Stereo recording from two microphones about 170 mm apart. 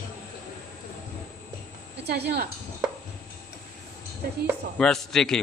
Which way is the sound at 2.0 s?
75° right (ahead or behind).